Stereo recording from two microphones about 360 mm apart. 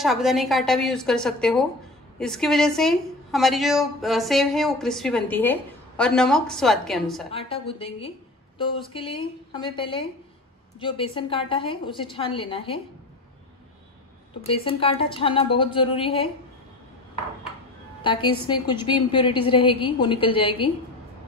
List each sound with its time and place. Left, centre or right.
0.0 s a woman's voice: centre
7.2 s a woman's voice: centre
14.4 s a woman's voice: centre
18.0 s a woman's voice: centre